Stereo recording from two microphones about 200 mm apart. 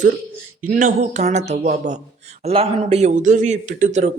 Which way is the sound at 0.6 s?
45° right (ahead or behind).